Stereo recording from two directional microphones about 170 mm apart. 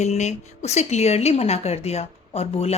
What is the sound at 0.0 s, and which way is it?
A woman's voice, 40° left (ahead or behind).